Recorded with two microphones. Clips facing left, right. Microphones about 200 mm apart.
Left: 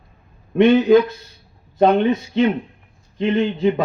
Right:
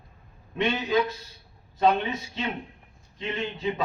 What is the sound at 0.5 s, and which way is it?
A man's voice, 55° left (ahead or behind).